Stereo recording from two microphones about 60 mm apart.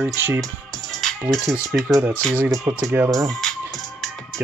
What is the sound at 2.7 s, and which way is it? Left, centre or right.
Speech, right.